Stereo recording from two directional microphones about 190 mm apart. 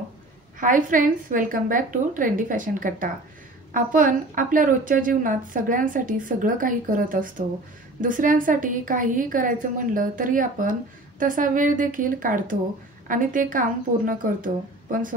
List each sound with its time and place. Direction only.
0.6 s a woman's voice: 45° right (ahead or behind)